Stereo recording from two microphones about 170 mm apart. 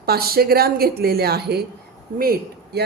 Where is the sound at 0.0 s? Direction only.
65° right (ahead or behind).